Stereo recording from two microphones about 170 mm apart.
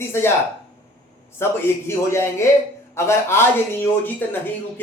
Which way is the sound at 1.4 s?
15° left (ahead or behind).